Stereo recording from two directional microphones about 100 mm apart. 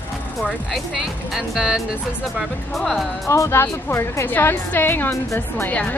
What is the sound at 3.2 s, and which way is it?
A woman's voice, 30° left (ahead or behind).